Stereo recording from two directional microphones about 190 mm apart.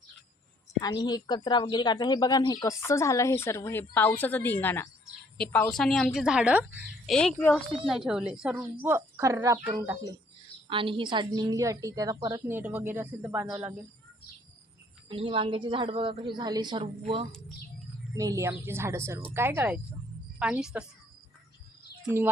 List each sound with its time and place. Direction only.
0.8 s a woman's voice: 20° left (ahead or behind); by 6.7 s 5° right (ahead or behind)
7.1 s a woman's voice: 5° left (ahead or behind); by 12.4 s 20° right (ahead or behind)
12.5 s speech: 10° right (ahead or behind)
15.1 s a woman's voice: 25° right (ahead or behind)
18.1 s a woman's voice: 20° right (ahead or behind)